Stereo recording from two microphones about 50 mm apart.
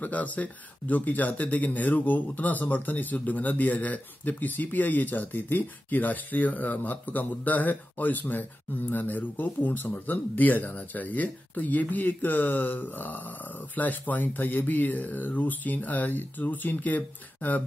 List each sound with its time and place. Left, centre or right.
0.0 s speech: left